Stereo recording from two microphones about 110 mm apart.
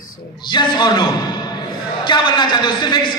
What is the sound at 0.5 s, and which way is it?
Speech, 45° left (ahead or behind).